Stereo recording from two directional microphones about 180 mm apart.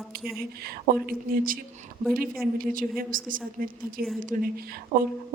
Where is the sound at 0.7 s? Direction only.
55° right (ahead or behind).